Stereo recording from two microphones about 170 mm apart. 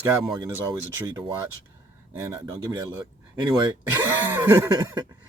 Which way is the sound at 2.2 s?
20° right (ahead or behind).